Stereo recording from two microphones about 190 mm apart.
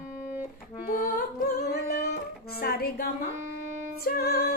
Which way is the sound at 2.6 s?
55° left (ahead or behind).